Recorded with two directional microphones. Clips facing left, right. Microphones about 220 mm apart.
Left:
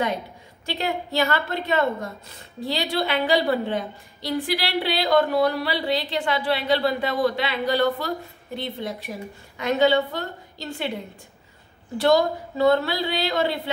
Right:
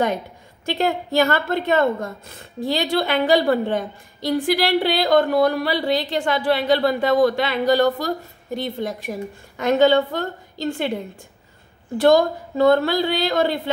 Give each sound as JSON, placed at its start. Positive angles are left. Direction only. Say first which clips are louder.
{"t": 0.7, "sound": "a woman's voice", "louder": "right 5 dB", "side_deg": -50}
{"t": 12.0, "sound": "a woman's voice", "louder": "right 4 dB", "side_deg": -50}